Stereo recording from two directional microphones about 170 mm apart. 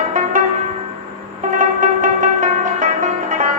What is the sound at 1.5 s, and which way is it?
Music, 50° right (ahead or behind).